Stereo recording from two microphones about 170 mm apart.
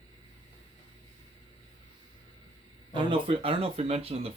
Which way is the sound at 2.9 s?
30° right (ahead or behind).